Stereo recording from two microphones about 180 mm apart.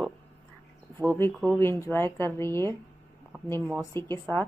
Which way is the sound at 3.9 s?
15° left (ahead or behind).